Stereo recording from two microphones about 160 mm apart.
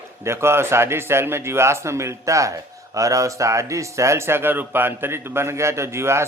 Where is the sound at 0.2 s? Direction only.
15° right (ahead or behind).